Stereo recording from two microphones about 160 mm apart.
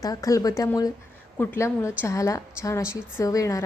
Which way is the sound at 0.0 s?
20° left (ahead or behind).